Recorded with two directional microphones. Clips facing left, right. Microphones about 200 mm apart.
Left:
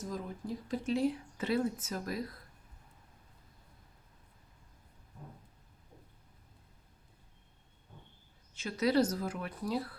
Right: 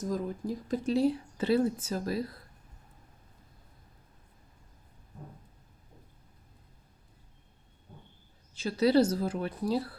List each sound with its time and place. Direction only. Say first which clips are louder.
0.0 s speech: right 7 dB; 40° right (ahead or behind)
8.5 s speech: right 5 dB; 30° right (ahead or behind)